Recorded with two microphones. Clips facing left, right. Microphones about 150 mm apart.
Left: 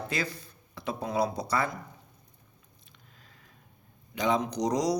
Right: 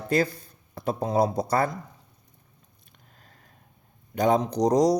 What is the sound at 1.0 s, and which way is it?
Speech, 40° right (ahead or behind).